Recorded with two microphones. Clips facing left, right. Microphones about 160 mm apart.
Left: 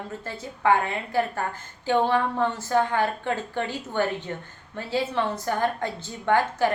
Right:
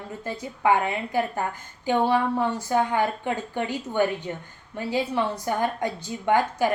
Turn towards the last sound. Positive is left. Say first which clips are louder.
# even
turn(degrees=-15)  # may be behind; listen again after turning